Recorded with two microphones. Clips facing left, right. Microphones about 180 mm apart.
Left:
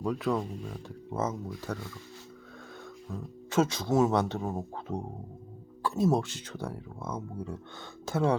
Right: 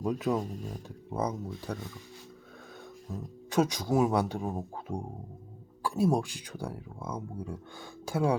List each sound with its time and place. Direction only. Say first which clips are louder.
0.0 s speech: even; 20° right (ahead or behind)
0.3 s speech: even; 40° right (ahead or behind)
1.1 s speech: even; 15° right (ahead or behind)
3.5 s speech: left 1 dB; 15° right (ahead or behind)